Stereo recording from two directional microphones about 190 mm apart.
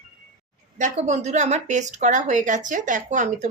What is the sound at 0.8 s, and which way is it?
A woman's voice, 35° right (ahead or behind).